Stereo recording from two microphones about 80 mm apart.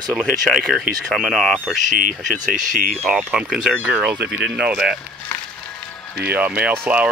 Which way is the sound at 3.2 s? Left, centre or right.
Centre.